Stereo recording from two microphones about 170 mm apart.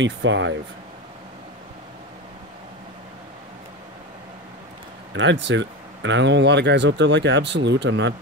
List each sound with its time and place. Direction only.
0.0 s speech: 90° right
5.1 s speech: 90° right